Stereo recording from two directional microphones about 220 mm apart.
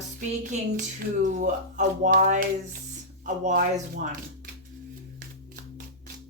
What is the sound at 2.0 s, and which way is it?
Speech, 35° right (ahead or behind).